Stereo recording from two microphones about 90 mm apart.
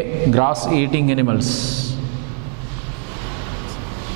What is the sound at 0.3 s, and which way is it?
A man's voice, 15° right (ahead or behind).